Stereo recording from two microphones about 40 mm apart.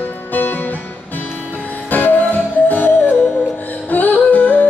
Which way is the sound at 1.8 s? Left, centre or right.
Left.